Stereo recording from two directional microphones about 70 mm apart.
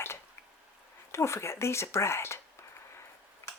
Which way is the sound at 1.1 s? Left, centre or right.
Left.